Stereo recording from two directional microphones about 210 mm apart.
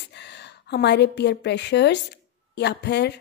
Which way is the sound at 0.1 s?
55° left (ahead or behind).